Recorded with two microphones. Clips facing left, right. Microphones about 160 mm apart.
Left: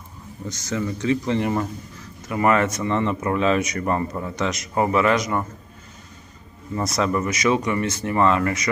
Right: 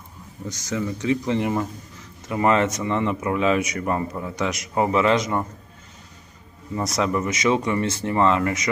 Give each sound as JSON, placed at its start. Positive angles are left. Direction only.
{"t": 0.4, "sound": "speech", "side_deg": -15}
{"t": 6.7, "sound": "speech", "side_deg": -15}